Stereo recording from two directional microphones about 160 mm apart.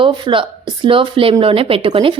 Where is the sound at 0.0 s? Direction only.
30° right (ahead or behind).